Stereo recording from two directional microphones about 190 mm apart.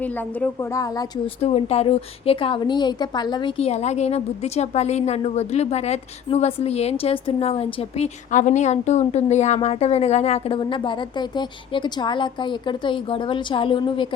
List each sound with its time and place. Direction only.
0.0 s a woman's voice: 10° left (ahead or behind)
1.4 s a woman's voice: 35° left (ahead or behind)